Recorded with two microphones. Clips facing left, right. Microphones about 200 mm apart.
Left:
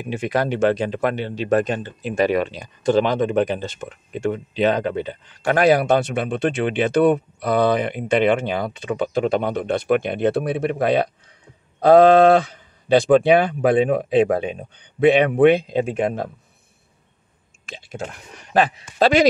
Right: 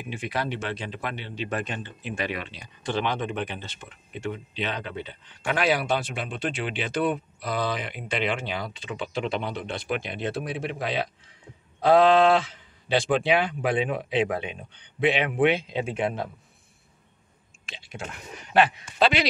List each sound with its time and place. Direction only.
0.0 s speech: 45° left (ahead or behind)
17.6 s a sound: 50° left (ahead or behind)
18.5 s speech: 40° left (ahead or behind)